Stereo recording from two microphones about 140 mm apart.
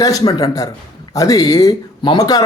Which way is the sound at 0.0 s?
25° left (ahead or behind).